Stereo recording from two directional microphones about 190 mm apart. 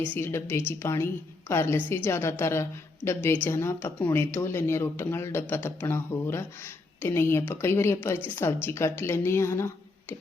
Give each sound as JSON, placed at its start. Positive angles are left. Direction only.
{"t": 0.0, "sound": "a woman's voice", "side_deg": 10}